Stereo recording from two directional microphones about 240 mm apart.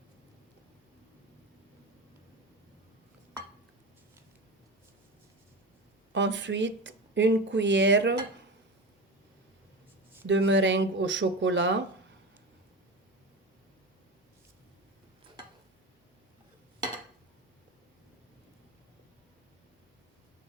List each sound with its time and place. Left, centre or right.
6.1 s speech: right
10.2 s speech: right